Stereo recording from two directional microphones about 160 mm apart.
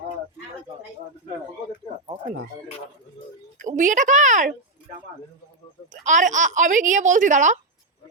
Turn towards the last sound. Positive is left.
turn(degrees=-50)  # may be behind; listen again after turning